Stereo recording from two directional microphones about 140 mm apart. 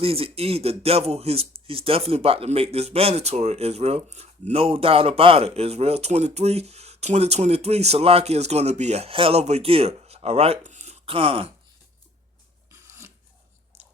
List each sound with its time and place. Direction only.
0.0 s speech: 45° right (ahead or behind)